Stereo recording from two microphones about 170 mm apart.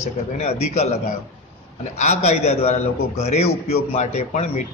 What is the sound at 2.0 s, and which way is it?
A man's voice, 40° left (ahead or behind).